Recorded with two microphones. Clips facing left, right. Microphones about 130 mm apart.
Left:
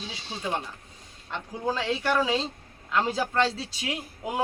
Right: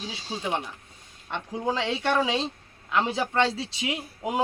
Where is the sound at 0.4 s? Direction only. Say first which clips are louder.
Even; 15° right (ahead or behind).